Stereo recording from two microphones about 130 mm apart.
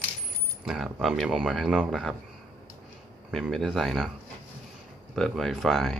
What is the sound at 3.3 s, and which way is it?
Speech, centre (ahead or behind).